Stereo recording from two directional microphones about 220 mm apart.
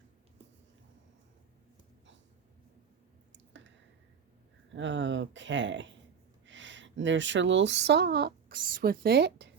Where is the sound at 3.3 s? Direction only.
55° right (ahead or behind).